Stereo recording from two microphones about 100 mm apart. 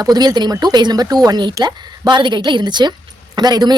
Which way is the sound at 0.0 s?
40° right (ahead or behind).